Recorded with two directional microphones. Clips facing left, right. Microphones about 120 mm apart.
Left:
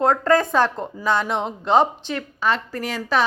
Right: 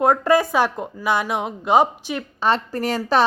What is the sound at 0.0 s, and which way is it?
Speech, 10° right (ahead or behind).